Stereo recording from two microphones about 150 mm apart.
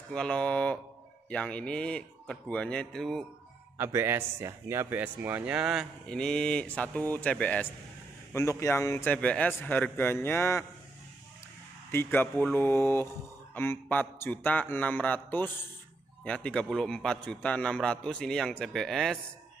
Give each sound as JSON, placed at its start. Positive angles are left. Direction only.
{"t": 0.1, "sound": "a man's voice", "side_deg": 5}
{"t": 3.7, "sound": "speech", "side_deg": -15}
{"t": 8.3, "sound": "a man's voice", "side_deg": 20}
{"t": 11.9, "sound": "a man's voice", "side_deg": 15}